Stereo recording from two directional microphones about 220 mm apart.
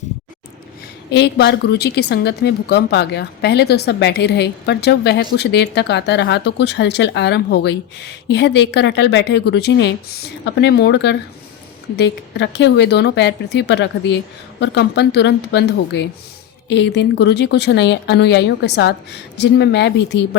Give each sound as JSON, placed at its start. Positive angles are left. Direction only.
{"t": 1.1, "sound": "a woman's voice", "side_deg": 50}